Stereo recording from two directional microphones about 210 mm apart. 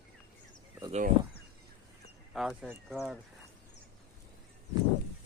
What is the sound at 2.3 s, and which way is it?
Speech, centre (ahead or behind).